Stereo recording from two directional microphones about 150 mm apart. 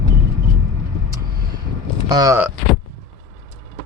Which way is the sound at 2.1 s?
25° right (ahead or behind).